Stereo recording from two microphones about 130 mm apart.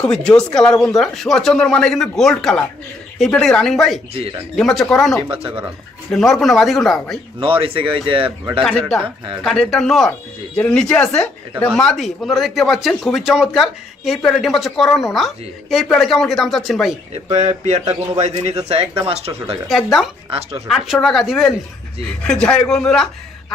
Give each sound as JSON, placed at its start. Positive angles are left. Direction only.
{"t": 0.0, "sound": "speech", "side_deg": 5}
{"t": 7.3, "sound": "speech", "side_deg": -45}
{"t": 9.4, "sound": "speech", "side_deg": 5}
{"t": 17.3, "sound": "a man's voice", "side_deg": -60}
{"t": 19.6, "sound": "speech", "side_deg": 0}